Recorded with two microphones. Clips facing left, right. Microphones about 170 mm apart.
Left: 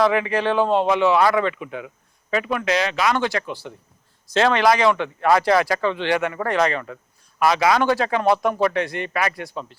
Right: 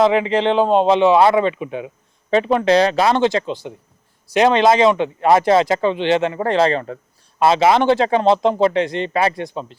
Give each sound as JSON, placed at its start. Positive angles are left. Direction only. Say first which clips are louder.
{"t": 0.0, "sound": "speech", "louder": "right 4 dB", "side_deg": -20}